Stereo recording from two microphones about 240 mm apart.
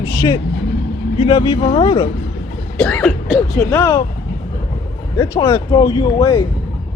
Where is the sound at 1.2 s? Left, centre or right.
Centre.